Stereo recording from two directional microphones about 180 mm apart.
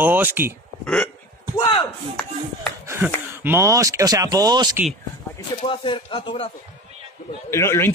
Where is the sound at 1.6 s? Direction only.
25° left (ahead or behind).